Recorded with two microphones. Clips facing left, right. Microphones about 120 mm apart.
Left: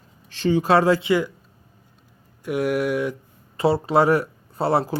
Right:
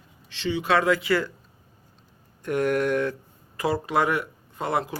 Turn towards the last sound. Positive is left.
turn(degrees=30)  # may be behind; listen again after turning